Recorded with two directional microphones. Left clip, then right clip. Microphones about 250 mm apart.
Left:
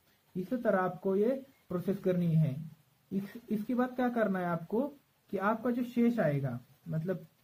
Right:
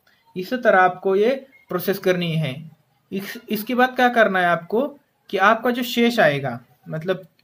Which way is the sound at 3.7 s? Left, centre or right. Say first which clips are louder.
Right 16 dB; centre.